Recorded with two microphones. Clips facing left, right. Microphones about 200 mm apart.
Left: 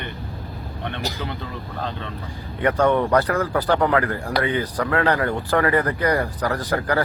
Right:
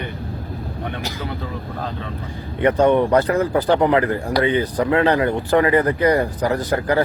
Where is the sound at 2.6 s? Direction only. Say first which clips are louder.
Right 4 dB; 20° right (ahead or behind).